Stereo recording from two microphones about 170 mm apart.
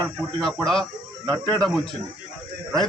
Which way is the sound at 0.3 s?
Centre (ahead or behind).